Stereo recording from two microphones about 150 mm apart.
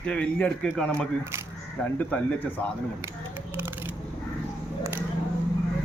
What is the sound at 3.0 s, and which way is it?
Scissors, 15° right (ahead or behind).